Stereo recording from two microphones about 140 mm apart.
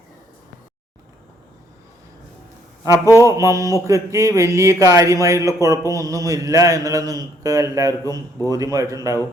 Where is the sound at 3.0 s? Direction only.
20° left (ahead or behind).